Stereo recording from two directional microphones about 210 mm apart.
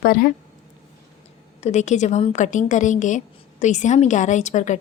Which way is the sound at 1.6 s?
30° left (ahead or behind).